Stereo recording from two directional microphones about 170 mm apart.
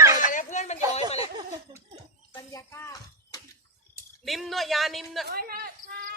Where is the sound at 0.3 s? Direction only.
45° left (ahead or behind).